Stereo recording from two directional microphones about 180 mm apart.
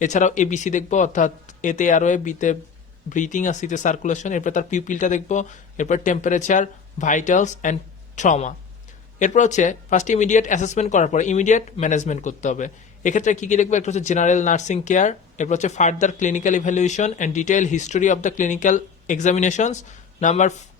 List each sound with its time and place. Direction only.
0.0 s speech: 45° left (ahead or behind)